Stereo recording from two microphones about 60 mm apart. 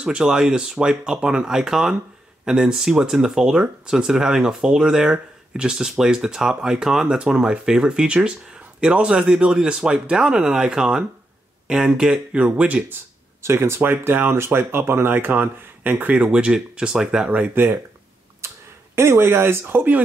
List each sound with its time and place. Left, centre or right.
0.0 s speech: centre
13.4 s speech: right
16.1 s speech: centre
17.3 s speech: right
18.4 s a sound: right
18.9 s speech: right